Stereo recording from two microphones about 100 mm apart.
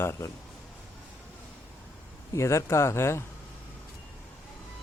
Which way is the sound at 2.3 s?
30° left (ahead or behind).